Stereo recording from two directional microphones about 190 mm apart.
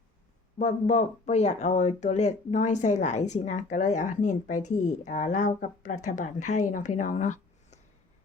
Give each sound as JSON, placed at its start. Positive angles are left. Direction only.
{"t": 0.6, "sound": "speech", "side_deg": 40}